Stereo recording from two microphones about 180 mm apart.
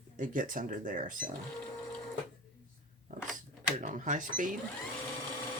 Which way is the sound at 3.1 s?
45° right (ahead or behind).